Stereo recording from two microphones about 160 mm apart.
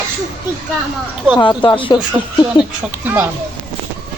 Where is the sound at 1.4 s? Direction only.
30° left (ahead or behind).